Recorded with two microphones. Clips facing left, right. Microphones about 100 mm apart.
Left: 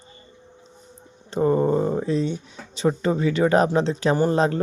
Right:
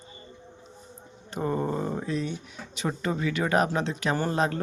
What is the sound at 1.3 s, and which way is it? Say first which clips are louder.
Speech: left 9 dB; 30° left (ahead or behind).